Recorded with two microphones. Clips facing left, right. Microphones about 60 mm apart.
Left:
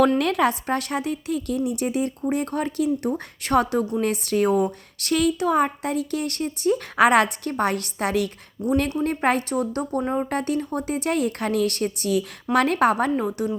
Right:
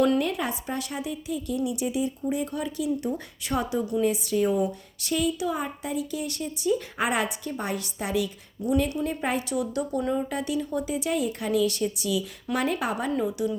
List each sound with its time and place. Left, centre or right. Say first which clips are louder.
0.2 s speech: left 7 dB; left
8.6 s speech: left 3 dB; left
9.0 s speech: left 6 dB; left